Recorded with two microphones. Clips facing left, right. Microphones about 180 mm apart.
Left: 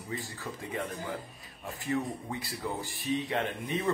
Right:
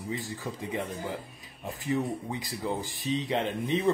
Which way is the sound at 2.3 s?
15° right (ahead or behind).